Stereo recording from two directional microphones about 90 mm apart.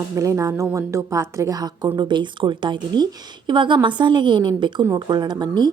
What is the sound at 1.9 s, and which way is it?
A woman's voice, 55° right (ahead or behind).